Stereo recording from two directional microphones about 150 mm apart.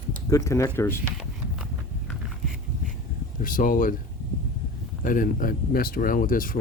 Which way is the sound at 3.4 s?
65° left (ahead or behind).